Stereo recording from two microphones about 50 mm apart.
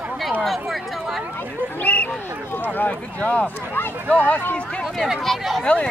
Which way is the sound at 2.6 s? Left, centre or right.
Left.